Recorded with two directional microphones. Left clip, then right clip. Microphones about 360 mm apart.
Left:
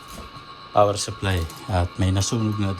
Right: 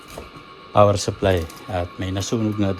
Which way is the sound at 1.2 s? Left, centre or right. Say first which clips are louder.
Right 8 dB; centre.